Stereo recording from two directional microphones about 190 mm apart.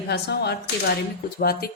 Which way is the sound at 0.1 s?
60° left (ahead or behind).